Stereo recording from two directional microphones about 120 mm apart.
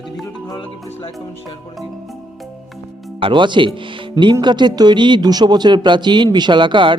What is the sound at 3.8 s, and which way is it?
Music, 45° right (ahead or behind).